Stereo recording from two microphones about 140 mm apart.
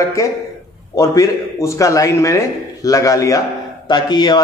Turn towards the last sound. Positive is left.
turn(degrees=30)  # may be behind; listen again after turning